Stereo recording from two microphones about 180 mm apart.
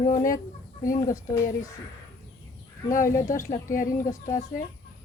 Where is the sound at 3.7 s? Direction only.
50° left (ahead or behind).